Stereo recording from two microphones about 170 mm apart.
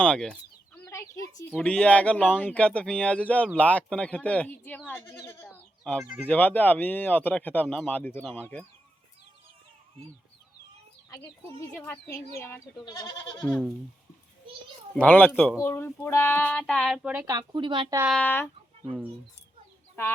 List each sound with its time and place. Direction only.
0.0 s speech: 5° left (ahead or behind)
0.9 s chicken: 20° left (ahead or behind)
1.5 s speech: 5° left (ahead or behind)
5.8 s speech: centre (ahead or behind)
11.7 s speech: 15° left (ahead or behind)
14.9 s speech: 10° left (ahead or behind); by 17.2 s 5° right (ahead or behind)
17.2 s speech: 25° right (ahead or behind)
18.1 s speech: 10° left (ahead or behind)